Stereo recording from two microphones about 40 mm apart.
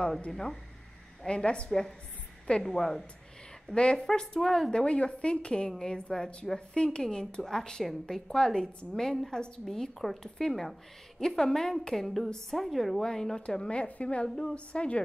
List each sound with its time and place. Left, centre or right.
0.3 s a woman's voice: centre
1.2 s speech: left
1.7 s a woman's voice: centre
3.7 s a woman's voice: left
9.9 s a woman's voice: centre
13.0 s a woman's voice: centre
13.7 s a woman's voice: left
14.2 s a woman's voice: centre
14.5 s speech: left